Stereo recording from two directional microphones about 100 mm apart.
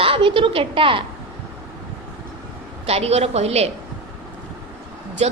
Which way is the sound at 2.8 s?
90° right.